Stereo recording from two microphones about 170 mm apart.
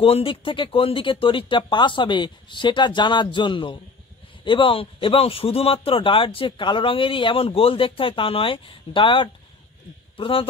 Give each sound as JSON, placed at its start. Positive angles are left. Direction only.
{"t": 0.0, "sound": "a man's voice", "side_deg": 35}